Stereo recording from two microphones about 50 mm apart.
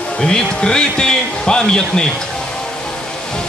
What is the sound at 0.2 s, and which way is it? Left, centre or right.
Speech, centre.